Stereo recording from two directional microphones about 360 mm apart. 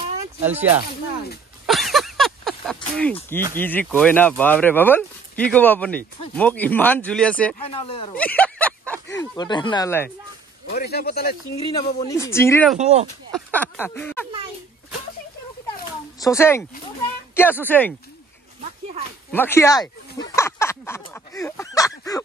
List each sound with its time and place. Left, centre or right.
0.4 s speech: centre
1.7 s a sound: centre
3.2 s speech: centre
7.5 s speech: centre
8.2 s speech: centre
10.7 s a man's voice: left
11.7 s speech: centre
16.2 s speech: centre
19.3 s a sound: centre